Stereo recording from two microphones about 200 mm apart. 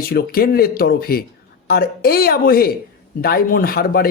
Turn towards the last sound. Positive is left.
turn(degrees=50)  # may be behind; listen again after turning